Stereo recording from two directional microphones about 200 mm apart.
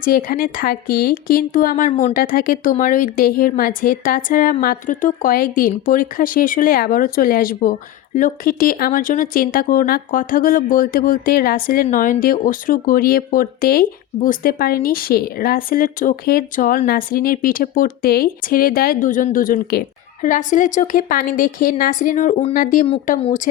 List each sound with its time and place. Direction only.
0.0 s a woman's voice: 45° left (ahead or behind)